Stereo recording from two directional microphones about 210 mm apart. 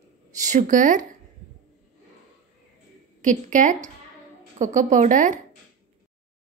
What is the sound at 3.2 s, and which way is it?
A woman's voice, 35° right (ahead or behind).